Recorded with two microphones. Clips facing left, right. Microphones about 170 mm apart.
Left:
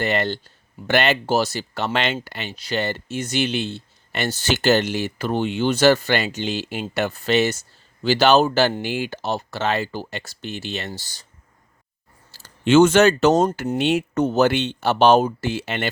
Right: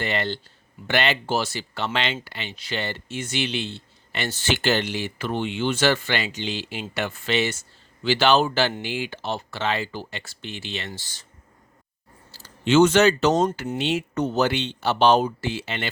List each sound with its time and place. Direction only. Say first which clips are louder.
0.0 s speech: left 4 dB; 45° left (ahead or behind)
12.3 s speech: left 4 dB; 50° left (ahead or behind)